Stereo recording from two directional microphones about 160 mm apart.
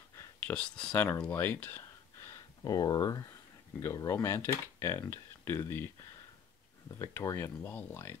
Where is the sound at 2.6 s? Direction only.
25° left (ahead or behind).